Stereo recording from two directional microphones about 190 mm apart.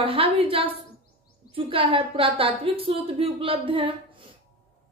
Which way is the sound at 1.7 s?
30° right (ahead or behind).